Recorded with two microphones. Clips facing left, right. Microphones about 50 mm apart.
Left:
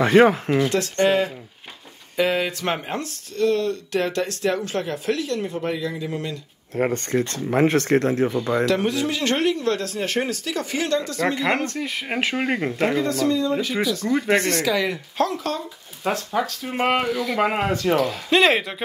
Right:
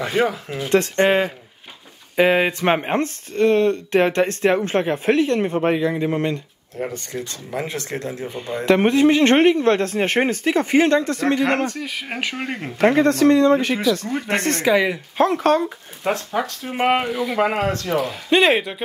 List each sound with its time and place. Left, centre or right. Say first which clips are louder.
0.0 s speech: left 6 dB; left
0.7 s speech: right 8 dB; right
6.8 s speech: left 6 dB; left
8.3 s speech: left 5 dB; left
8.6 s speech: right 7 dB; right
11.7 s speech: left 2 dB; centre
12.7 s speech: right 11 dB; right
13.9 s speech: left 3 dB; right
14.6 s speech: right 5 dB; right
15.2 s speech: right 12 dB; right
16.0 s speech: right 1 dB; centre
17.9 s speech: right 3 dB; centre